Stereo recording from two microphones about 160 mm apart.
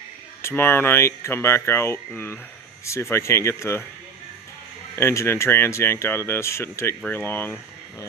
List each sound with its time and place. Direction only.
0.4 s speech: 15° left (ahead or behind)
4.9 s speech: 15° left (ahead or behind)